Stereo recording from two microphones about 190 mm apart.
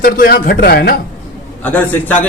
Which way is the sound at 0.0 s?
50° left (ahead or behind).